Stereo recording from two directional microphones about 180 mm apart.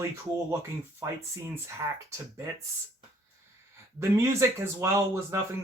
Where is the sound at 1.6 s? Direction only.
15° right (ahead or behind).